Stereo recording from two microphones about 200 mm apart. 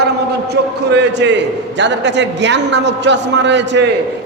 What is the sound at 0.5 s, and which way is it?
A man's voice, 60° right (ahead or behind).